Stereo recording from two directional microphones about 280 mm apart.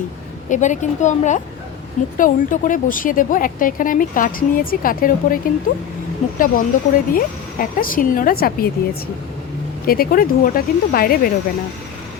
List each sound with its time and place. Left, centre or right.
0.5 s a woman's voice: left
9.8 s speech: left